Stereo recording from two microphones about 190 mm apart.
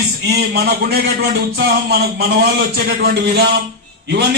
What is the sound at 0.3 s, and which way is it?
A man's voice, 60° right (ahead or behind).